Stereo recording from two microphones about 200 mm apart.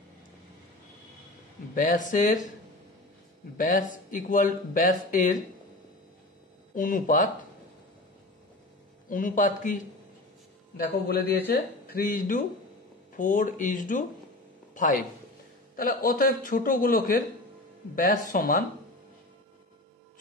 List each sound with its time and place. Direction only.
1.8 s speech: 40° left (ahead or behind)
3.5 s speech: 40° left (ahead or behind)
6.7 s a man's voice: 45° left (ahead or behind)
9.1 s speech: 40° left (ahead or behind)
10.8 s a man's voice: 50° left (ahead or behind)
14.7 s a sound: 40° left (ahead or behind)
15.7 s a man's voice: 45° left (ahead or behind)
18.3 s a man's voice: 45° left (ahead or behind)